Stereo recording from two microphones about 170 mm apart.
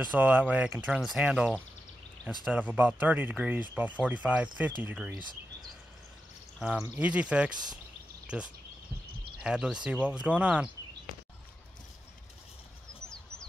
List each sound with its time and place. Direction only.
0.1 s speech: 10° right (ahead or behind)
6.8 s speech: 10° right (ahead or behind)